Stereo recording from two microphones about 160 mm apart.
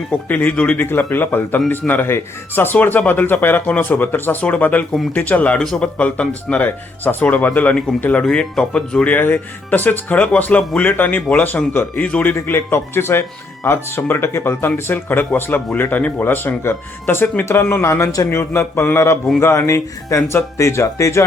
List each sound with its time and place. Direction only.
0.3 s speech: 10° left (ahead or behind)